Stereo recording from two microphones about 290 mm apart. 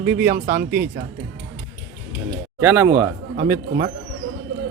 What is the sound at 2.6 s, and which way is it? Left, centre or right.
Speech, centre.